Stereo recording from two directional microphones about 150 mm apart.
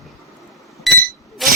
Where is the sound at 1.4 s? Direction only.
Centre (ahead or behind).